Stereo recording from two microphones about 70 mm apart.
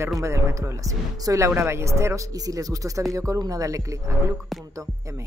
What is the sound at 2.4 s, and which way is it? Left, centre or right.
Speech, right.